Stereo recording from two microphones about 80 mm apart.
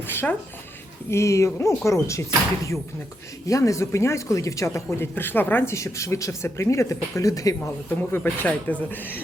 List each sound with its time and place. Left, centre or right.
0.1 s speech: left
1.1 s speech: left
3.4 s speech: left
5.7 s speech: left
7.9 s speech: left